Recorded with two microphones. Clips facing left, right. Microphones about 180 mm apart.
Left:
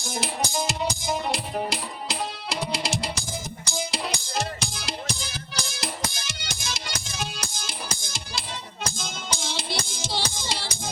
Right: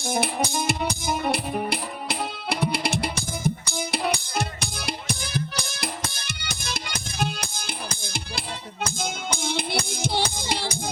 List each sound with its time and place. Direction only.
0.0 s music: 60° right (ahead or behind)